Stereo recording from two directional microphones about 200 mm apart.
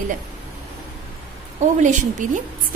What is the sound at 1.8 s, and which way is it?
Speech, 40° right (ahead or behind).